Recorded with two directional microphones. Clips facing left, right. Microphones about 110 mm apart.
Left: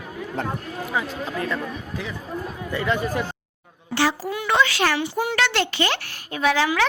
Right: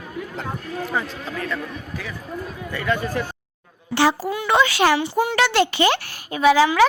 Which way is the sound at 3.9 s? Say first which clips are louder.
Right 4 dB; 20° right (ahead or behind).